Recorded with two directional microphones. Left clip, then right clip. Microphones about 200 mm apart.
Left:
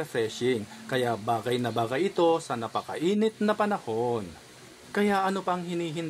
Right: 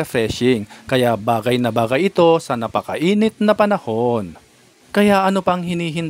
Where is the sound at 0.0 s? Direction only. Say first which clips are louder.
Right 10 dB; 45° right (ahead or behind).